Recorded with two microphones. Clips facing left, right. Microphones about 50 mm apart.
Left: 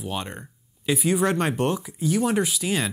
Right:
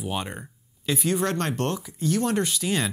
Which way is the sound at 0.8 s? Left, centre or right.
Centre.